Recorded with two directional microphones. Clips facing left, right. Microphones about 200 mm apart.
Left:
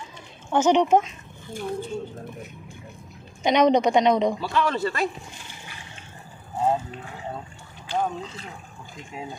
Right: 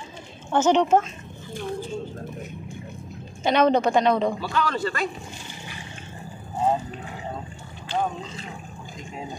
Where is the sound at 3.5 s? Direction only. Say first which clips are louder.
Left 1 dB; 15° left (ahead or behind).